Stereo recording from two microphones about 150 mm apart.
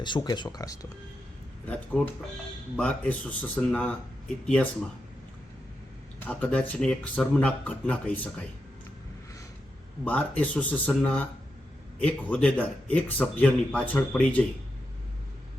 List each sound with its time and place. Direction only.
0.0 s speech: 30° left (ahead or behind)
1.6 s speech: 10° left (ahead or behind)
6.1 s speech: 10° left (ahead or behind)
10.0 s speech: 10° left (ahead or behind)